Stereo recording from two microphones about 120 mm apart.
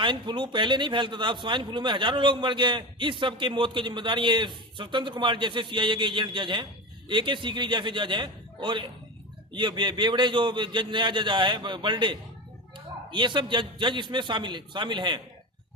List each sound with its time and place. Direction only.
0.0 s a man's voice: 40° right (ahead or behind)